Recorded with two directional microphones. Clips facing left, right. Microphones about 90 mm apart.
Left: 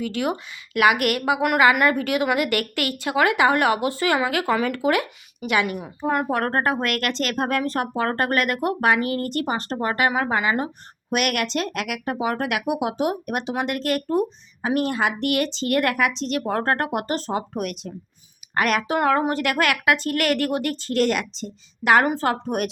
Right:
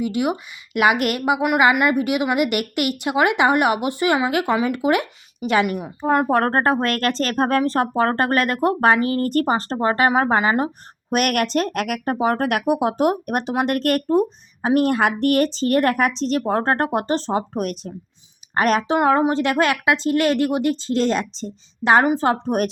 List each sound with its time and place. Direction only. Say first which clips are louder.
0.0 s speech: right 3 dB; 15° right (ahead or behind)
6.0 s speech: right 5 dB; 35° right (ahead or behind)
9.2 s speech: right 6 dB; 45° right (ahead or behind)
14.6 s speech: right 5 dB; 45° right (ahead or behind)
22.0 s a woman's voice: right 4 dB; 15° right (ahead or behind)
22.3 s speech: right 4 dB; 35° right (ahead or behind)